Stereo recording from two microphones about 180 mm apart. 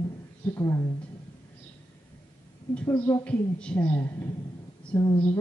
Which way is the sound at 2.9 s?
10° left (ahead or behind).